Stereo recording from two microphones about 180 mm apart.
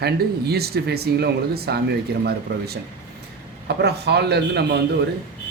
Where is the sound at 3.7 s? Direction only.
65° right (ahead or behind).